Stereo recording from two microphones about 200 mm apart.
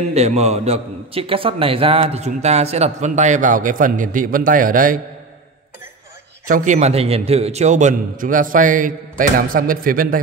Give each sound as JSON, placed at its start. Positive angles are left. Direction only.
{"t": 0.1, "sound": "a man's voice", "side_deg": -30}
{"t": 6.4, "sound": "a man's voice", "side_deg": -40}